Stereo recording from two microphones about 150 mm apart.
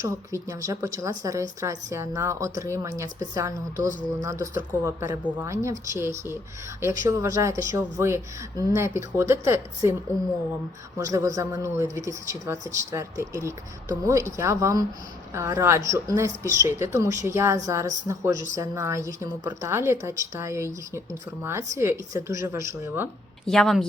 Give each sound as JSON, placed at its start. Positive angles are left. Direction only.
{"t": 0.0, "sound": "a woman's voice", "side_deg": -20}
{"t": 10.9, "sound": "a woman's voice", "side_deg": -20}
{"t": 23.5, "sound": "speech", "side_deg": 0}